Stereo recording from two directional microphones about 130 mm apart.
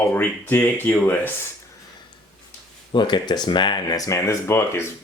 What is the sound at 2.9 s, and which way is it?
Speech, 35° left (ahead or behind).